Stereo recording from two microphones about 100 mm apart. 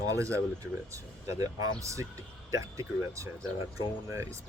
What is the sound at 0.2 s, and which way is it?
Speech, 30° right (ahead or behind).